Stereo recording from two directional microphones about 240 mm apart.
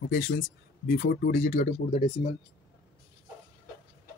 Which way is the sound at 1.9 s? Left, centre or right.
Left.